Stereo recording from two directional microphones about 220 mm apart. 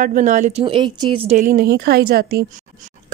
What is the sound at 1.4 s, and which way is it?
A woman's voice, 40° right (ahead or behind).